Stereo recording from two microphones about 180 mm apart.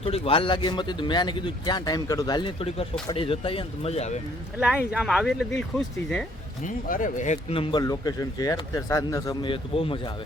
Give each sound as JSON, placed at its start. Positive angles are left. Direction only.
{"t": 0.0, "sound": "speech", "side_deg": 30}
{"t": 4.9, "sound": "speech", "side_deg": -5}
{"t": 6.7, "sound": "speech", "side_deg": 50}